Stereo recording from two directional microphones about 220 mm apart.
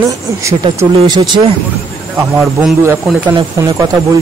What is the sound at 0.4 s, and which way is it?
Speech, 15° right (ahead or behind).